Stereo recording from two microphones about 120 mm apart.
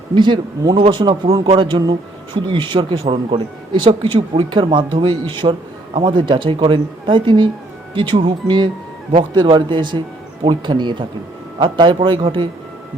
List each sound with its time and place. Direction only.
0.1 s a man's voice: 40° right (ahead or behind)